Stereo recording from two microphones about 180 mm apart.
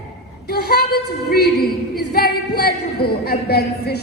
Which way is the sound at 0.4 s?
60° left (ahead or behind).